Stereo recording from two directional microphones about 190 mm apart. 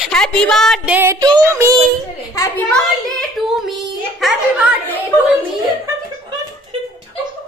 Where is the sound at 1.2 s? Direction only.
20° right (ahead or behind).